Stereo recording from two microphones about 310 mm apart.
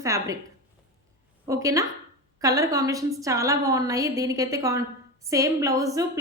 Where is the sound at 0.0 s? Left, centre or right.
Centre.